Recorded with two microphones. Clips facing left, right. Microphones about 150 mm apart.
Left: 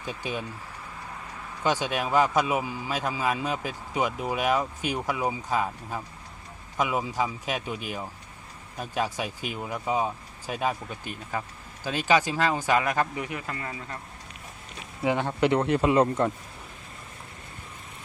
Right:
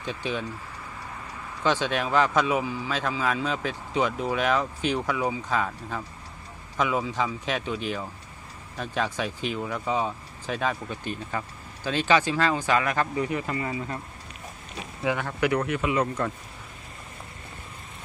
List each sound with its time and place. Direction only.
0.0 s speech: 10° left (ahead or behind)
1.6 s speech: 15° left (ahead or behind)
13.5 s speech: 10° right (ahead or behind)
15.0 s speech: 20° left (ahead or behind)